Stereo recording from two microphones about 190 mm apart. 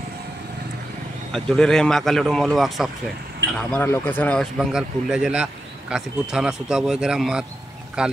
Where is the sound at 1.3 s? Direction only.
5° left (ahead or behind).